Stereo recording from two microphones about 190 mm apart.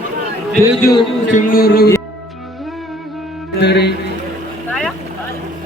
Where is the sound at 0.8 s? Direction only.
20° left (ahead or behind).